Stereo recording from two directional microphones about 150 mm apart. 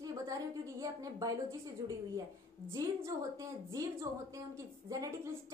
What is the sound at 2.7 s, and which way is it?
Speech, 20° right (ahead or behind).